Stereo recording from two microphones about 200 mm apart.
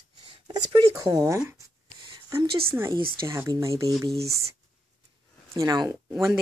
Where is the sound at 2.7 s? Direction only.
10° right (ahead or behind).